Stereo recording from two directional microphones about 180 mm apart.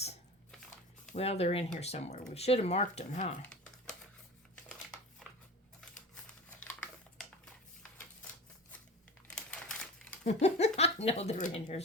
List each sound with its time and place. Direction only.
1.1 s speech: 35° left (ahead or behind)
9.3 s crumpling: 5° left (ahead or behind)
10.2 s speech: 35° left (ahead or behind)